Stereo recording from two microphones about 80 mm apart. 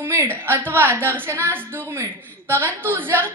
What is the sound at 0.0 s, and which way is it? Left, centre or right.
A woman's voice, right.